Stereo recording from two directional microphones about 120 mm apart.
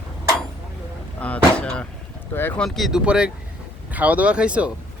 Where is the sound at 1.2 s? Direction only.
10° left (ahead or behind); by 4.7 s 10° right (ahead or behind).